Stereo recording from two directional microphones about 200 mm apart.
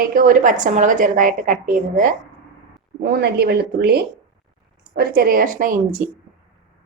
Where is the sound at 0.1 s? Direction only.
45° right (ahead or behind).